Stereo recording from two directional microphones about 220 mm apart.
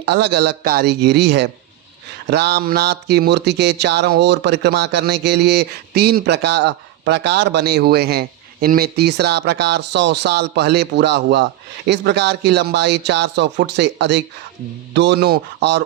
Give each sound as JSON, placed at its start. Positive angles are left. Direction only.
{"t": 0.0, "sound": "speech", "side_deg": -50}